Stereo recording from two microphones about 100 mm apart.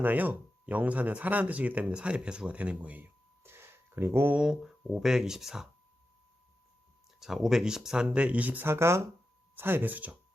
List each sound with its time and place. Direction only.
0.0 s speech: 15° right (ahead or behind)
4.4 s speech: 5° right (ahead or behind)
7.2 s speech: 5° right (ahead or behind)